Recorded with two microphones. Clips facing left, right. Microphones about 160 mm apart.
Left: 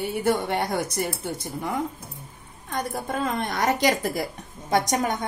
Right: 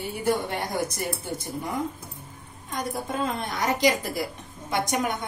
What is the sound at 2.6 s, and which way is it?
Speech, 60° left (ahead or behind).